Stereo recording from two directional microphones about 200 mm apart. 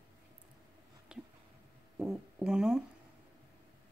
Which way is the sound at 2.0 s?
5° right (ahead or behind).